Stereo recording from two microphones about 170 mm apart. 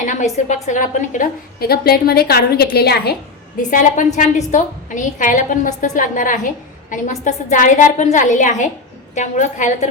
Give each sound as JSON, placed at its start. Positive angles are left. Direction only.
{"t": 0.0, "sound": "a woman's voice", "side_deg": 45}
{"t": 3.6, "sound": "a woman's voice", "side_deg": 50}